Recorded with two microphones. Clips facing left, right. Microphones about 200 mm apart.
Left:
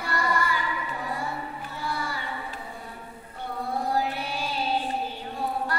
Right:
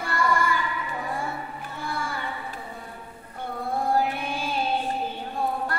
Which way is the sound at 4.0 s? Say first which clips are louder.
Right 2 dB; 50° right (ahead or behind).